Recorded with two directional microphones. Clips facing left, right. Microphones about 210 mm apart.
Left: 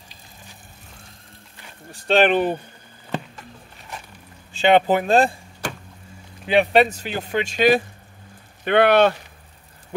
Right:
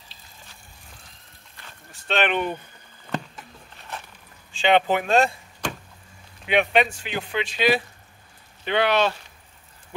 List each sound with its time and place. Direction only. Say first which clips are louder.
1.9 s speech: left 7 dB; 35° left (ahead or behind)
4.5 s speech: left 4 dB; 40° left (ahead or behind)
6.4 s speech: left 4 dB; 35° left (ahead or behind); by 9.1 s 55° left (ahead or behind)